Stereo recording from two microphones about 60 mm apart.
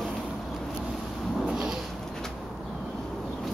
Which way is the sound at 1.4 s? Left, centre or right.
Centre.